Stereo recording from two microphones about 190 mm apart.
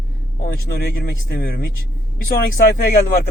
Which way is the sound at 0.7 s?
55° left (ahead or behind).